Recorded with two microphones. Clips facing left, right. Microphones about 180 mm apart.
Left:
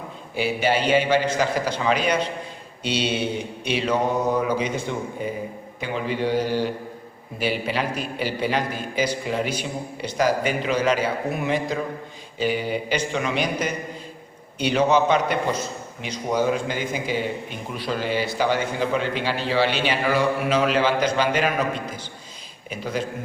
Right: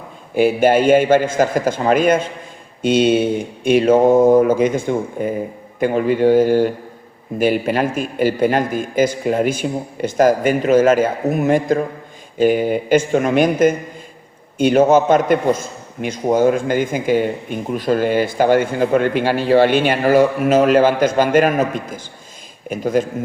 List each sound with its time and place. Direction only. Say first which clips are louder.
0.3 s a man's voice: right 9 dB; 50° right (ahead or behind)